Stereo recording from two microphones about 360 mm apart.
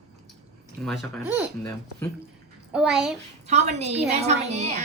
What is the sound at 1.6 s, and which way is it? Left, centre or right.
Speech, centre.